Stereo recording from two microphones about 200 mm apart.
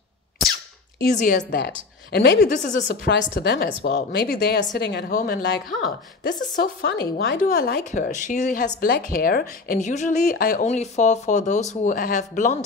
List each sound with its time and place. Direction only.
1.1 s a woman's voice: 40° left (ahead or behind)